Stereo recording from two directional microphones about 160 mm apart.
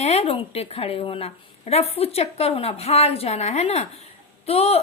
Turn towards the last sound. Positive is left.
turn(degrees=40)  # may be behind; listen again after turning